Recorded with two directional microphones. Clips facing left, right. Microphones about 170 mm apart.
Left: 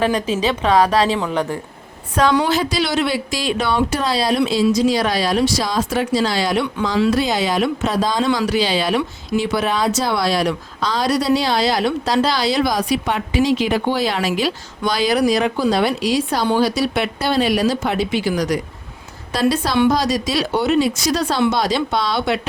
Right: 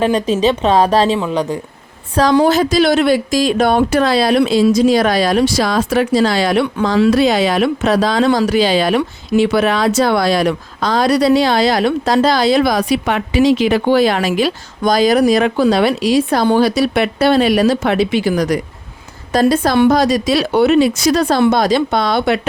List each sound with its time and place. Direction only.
0.0 s a woman's voice: 30° right (ahead or behind)
1.1 s a woman's voice: 20° right (ahead or behind)
2.1 s speech: 35° right (ahead or behind); by 8.3 s 75° right (ahead or behind)
8.3 s speech: 45° right (ahead or behind); by 14.0 s 80° right
14.0 s speech: 55° right (ahead or behind)